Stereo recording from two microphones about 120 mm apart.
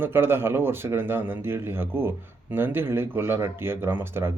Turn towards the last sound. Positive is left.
turn(degrees=-20)  # may be behind; listen again after turning